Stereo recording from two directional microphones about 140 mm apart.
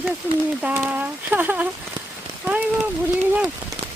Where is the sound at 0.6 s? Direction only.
10° right (ahead or behind).